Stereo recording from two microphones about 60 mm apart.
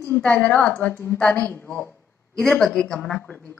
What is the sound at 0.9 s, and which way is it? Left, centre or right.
Speech, left.